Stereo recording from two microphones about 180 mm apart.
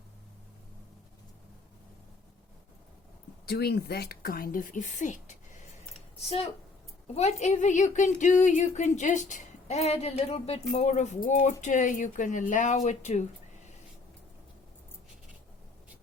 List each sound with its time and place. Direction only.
3.4 s a woman's voice: 60° left (ahead or behind); by 13.2 s 40° left (ahead or behind)